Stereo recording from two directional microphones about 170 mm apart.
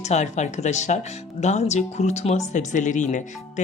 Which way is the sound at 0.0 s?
40° left (ahead or behind).